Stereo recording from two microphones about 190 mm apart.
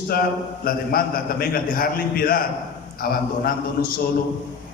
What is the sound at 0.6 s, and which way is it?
A man's voice, 50° left (ahead or behind).